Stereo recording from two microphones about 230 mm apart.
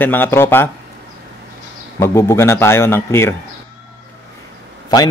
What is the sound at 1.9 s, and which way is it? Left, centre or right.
A man's voice, centre.